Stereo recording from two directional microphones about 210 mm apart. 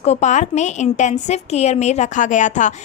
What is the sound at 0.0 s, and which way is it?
A woman's voice, 30° left (ahead or behind).